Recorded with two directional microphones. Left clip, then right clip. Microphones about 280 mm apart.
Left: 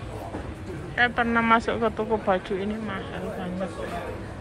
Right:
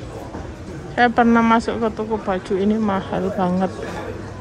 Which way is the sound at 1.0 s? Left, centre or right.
Centre.